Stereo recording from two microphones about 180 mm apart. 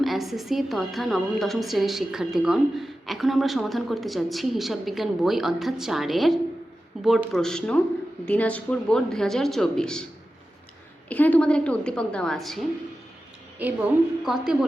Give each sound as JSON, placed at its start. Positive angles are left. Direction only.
{"t": 0.0, "sound": "a woman's voice", "side_deg": 0}
{"t": 11.1, "sound": "a woman's voice", "side_deg": 10}
{"t": 14.3, "sound": "a woman's voice", "side_deg": 0}